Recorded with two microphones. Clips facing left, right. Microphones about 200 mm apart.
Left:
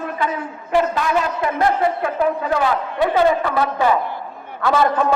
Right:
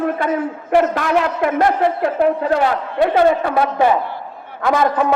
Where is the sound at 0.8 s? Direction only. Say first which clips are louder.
Right 3 dB; 65° right (ahead or behind).